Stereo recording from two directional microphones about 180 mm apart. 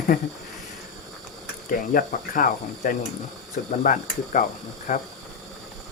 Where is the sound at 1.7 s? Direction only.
45° left (ahead or behind).